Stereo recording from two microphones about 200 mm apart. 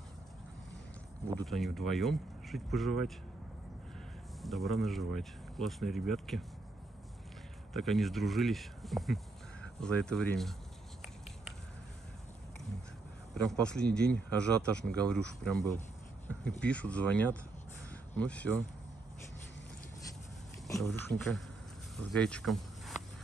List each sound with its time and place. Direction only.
1.3 s speech: centre (ahead or behind)
4.4 s speech: centre (ahead or behind)
7.7 s speech: centre (ahead or behind)
13.3 s speech: 5° left (ahead or behind)
21.9 s speech: 5° left (ahead or behind)